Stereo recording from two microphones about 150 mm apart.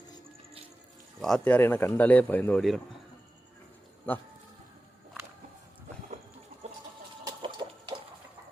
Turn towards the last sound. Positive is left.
turn(degrees=-30)  # may be behind; listen again after turning